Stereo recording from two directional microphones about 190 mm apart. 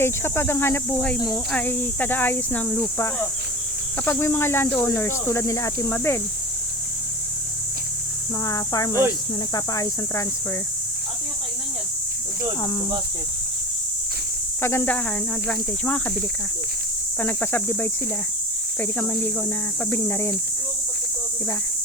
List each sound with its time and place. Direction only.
0.0 s speech: 10° left (ahead or behind)
8.4 s speech: 20° left (ahead or behind)
14.6 s speech: 10° left (ahead or behind)
17.2 s speech: 10° left (ahead or behind)